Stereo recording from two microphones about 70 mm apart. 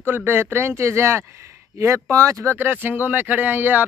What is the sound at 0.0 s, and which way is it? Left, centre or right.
Speech, right.